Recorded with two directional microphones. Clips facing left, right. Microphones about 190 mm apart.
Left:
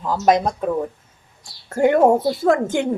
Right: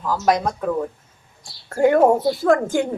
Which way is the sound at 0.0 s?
20° left (ahead or behind).